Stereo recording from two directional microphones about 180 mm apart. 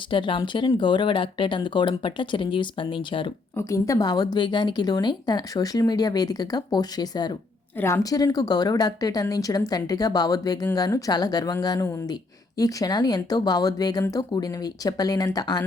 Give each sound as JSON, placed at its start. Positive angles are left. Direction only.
{"t": 0.1, "sound": "a woman's voice", "side_deg": 25}
{"t": 3.6, "sound": "a woman's voice", "side_deg": 15}